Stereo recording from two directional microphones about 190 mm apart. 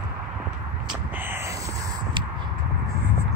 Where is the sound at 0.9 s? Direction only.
10° right (ahead or behind).